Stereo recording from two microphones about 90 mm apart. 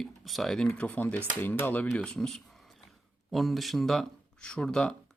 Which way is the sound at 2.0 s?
5° left (ahead or behind).